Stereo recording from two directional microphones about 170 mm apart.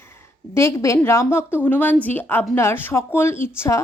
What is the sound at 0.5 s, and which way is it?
Speech, 15° left (ahead or behind).